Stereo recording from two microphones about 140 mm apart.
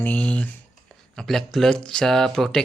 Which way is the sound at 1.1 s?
5° left (ahead or behind).